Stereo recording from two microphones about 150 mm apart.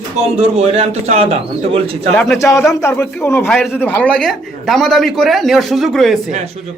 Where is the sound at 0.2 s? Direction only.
45° right (ahead or behind).